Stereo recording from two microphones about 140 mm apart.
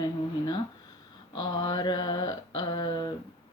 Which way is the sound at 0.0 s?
30° left (ahead or behind).